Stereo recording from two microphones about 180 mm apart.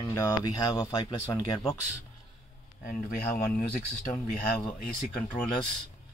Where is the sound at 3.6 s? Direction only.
50° left (ahead or behind).